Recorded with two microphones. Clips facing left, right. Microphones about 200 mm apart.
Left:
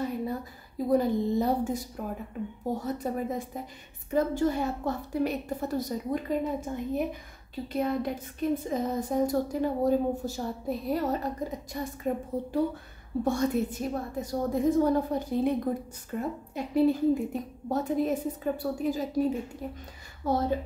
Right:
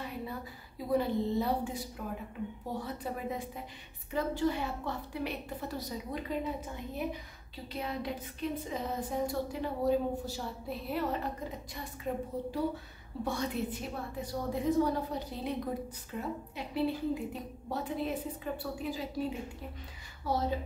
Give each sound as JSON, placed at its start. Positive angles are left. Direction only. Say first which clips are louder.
{"t": 0.0, "sound": "a woman's voice", "louder": "left 8 dB", "side_deg": 40}
{"t": 7.6, "sound": "a woman's voice", "louder": "left 8 dB", "side_deg": 50}
{"t": 20.2, "sound": "a woman's voice", "louder": "left 5 dB", "side_deg": 50}